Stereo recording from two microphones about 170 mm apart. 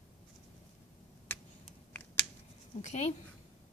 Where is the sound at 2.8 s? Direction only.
40° left (ahead or behind).